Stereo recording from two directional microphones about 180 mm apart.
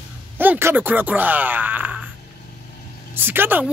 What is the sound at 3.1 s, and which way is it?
Speech, 10° right (ahead or behind).